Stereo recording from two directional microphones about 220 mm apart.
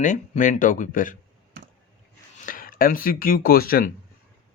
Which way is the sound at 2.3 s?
40° left (ahead or behind).